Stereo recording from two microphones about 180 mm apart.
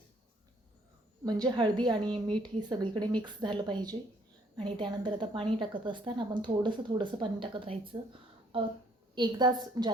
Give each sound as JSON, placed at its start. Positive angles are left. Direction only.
{"t": 1.2, "sound": "a woman's voice", "side_deg": -20}